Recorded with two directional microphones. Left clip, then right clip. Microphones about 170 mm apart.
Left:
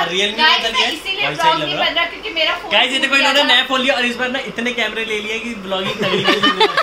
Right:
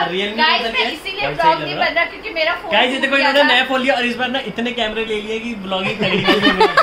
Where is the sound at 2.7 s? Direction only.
60° right (ahead or behind); by 5.0 s 40° right (ahead or behind).